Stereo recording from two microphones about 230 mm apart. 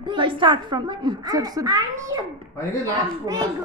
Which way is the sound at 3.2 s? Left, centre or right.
Centre.